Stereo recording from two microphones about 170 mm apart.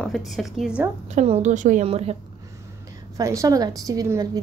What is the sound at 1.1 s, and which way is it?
A woman's voice, 40° right (ahead or behind).